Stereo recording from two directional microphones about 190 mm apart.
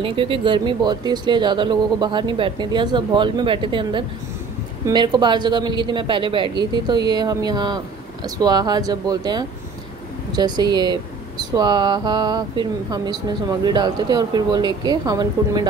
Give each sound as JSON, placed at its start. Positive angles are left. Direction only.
{"t": 0.0, "sound": "speech", "side_deg": -30}